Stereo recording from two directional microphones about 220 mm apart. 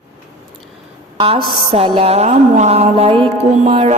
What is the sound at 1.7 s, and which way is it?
Music, 25° right (ahead or behind).